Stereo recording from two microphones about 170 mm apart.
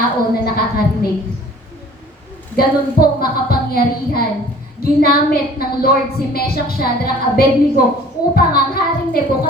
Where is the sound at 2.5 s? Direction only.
60° left (ahead or behind).